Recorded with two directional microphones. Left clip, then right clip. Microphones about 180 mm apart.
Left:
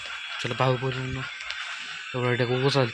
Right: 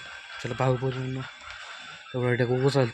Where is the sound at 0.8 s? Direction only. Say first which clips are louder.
Left 2 dB; 20° right (ahead or behind).